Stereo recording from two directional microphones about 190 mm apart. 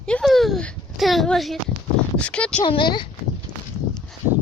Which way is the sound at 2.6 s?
25° left (ahead or behind).